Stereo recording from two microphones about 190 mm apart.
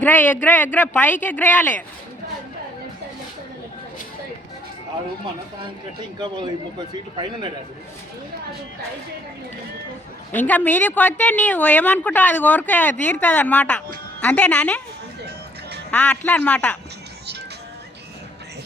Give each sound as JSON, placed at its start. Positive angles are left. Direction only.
{"t": 0.0, "sound": "a woman's voice", "side_deg": 10}
{"t": 6.0, "sound": "a man's voice", "side_deg": -25}
{"t": 10.3, "sound": "a woman's voice", "side_deg": 10}
{"t": 15.9, "sound": "a woman's voice", "side_deg": 10}